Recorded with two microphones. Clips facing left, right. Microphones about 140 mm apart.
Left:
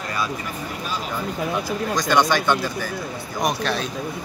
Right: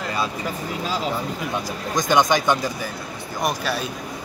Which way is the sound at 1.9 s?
20° right (ahead or behind).